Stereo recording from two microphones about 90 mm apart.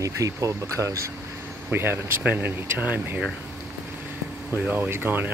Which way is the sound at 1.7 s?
25° right (ahead or behind).